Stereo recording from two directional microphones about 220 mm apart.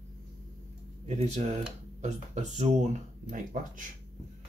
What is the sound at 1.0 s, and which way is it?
Speech, 30° right (ahead or behind).